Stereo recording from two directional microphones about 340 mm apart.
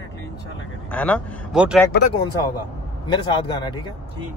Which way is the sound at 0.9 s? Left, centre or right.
Centre.